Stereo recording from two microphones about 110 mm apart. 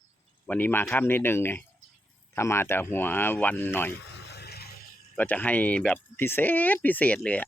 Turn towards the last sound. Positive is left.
turn(degrees=15)  # may be behind; listen again after turning